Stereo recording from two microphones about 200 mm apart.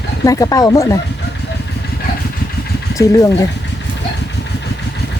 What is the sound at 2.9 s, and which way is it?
Speech, 15° left (ahead or behind).